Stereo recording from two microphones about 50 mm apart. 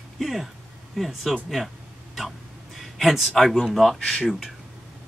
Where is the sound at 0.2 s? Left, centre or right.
Centre.